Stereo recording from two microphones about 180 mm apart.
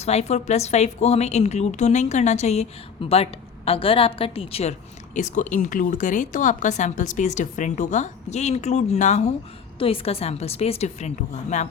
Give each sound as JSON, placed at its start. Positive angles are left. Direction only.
{"t": 0.0, "sound": "a woman's voice", "side_deg": 35}
{"t": 5.1, "sound": "a woman's voice", "side_deg": 45}